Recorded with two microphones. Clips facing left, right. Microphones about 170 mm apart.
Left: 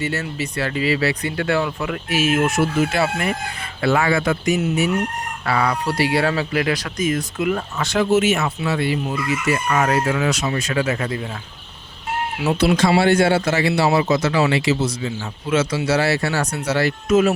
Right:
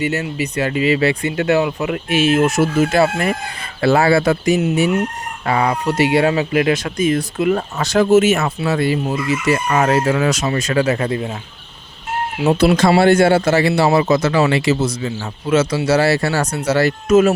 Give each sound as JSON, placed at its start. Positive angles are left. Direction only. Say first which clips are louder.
{"t": 0.0, "sound": "speech", "louder": "right 4 dB", "side_deg": -15}
{"t": 12.5, "sound": "speech", "louder": "right 4 dB", "side_deg": -50}